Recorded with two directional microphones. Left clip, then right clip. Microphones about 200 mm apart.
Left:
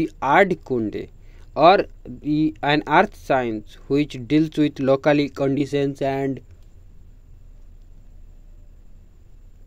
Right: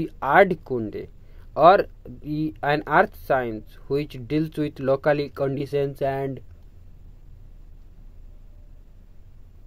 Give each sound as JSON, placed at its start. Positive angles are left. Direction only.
{"t": 0.0, "sound": "speech", "side_deg": 30}